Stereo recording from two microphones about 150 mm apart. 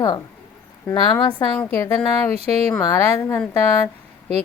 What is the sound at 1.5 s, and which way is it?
Speech, 15° left (ahead or behind).